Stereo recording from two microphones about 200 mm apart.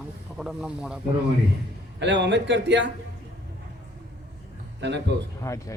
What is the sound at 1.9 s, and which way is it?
Speech, 60° right (ahead or behind).